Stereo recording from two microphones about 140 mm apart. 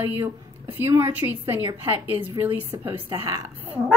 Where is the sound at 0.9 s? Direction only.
15° right (ahead or behind).